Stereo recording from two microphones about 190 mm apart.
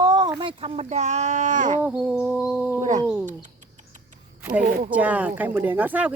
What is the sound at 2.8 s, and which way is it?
Speech, 40° right (ahead or behind).